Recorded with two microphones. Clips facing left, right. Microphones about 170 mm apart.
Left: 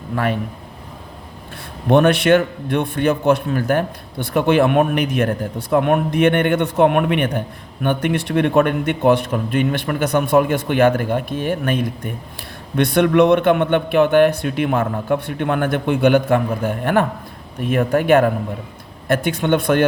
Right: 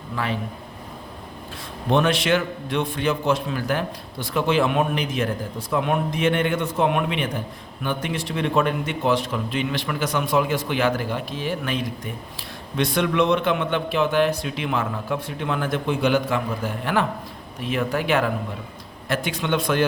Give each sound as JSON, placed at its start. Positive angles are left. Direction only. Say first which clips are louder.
{"t": 1.9, "sound": "a man's voice", "louder": "left 7 dB", "side_deg": 55}